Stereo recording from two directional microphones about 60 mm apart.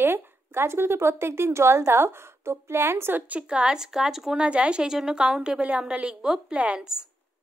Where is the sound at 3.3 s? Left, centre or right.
Centre.